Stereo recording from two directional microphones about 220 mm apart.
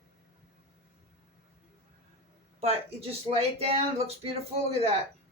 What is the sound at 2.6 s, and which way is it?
Speech, 25° right (ahead or behind).